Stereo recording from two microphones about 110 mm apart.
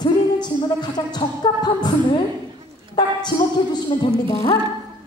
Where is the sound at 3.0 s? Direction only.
40° left (ahead or behind).